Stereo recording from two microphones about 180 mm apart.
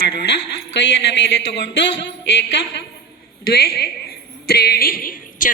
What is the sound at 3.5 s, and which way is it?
A woman's voice, 60° left (ahead or behind).